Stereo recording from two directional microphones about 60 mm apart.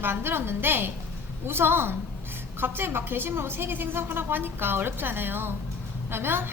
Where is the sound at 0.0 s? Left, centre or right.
Right.